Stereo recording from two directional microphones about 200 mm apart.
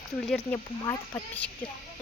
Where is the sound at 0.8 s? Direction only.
20° left (ahead or behind).